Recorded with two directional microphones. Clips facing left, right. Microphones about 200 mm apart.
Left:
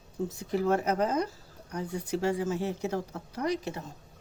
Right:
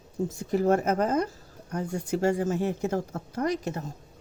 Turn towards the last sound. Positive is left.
turn(degrees=-45)  # may be behind; listen again after turning